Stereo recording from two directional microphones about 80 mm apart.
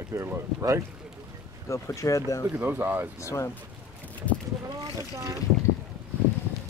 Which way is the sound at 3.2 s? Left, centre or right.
Left.